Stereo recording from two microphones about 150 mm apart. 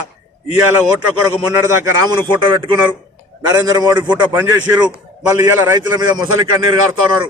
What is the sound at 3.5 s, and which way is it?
A man's voice, 20° right (ahead or behind).